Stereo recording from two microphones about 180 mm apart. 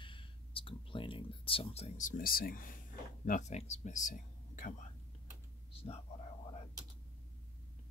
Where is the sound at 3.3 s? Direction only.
40° left (ahead or behind).